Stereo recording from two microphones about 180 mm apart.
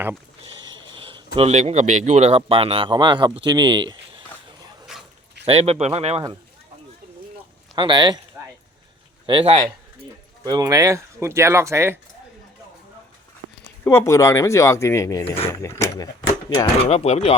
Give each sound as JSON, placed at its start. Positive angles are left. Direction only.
{"t": 0.4, "sound": "speech", "side_deg": -25}
{"t": 5.5, "sound": "speech", "side_deg": -35}
{"t": 7.8, "sound": "speech", "side_deg": -25}
{"t": 9.2, "sound": "speech", "side_deg": -30}
{"t": 13.8, "sound": "speech", "side_deg": 15}
{"t": 16.6, "sound": "speech", "side_deg": 35}